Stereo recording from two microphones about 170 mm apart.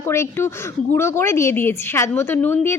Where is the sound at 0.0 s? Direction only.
15° left (ahead or behind).